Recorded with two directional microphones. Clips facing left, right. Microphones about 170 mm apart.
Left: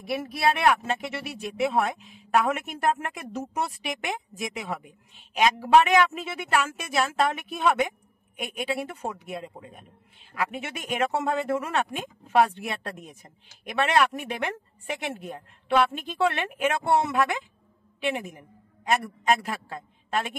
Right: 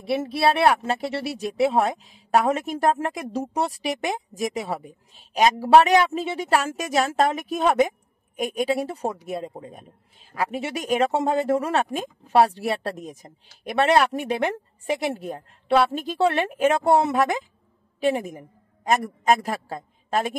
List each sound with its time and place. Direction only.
0.0 s a woman's voice: 30° right (ahead or behind)